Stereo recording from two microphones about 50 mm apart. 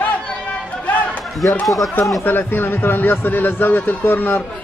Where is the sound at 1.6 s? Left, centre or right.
Centre.